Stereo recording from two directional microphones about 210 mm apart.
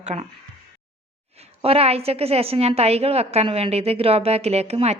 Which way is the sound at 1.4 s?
30° right (ahead or behind).